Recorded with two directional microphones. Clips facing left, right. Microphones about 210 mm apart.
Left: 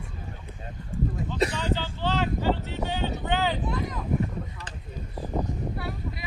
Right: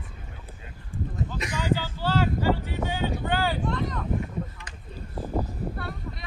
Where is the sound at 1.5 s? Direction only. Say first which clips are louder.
Right 2 dB; 10° right (ahead or behind).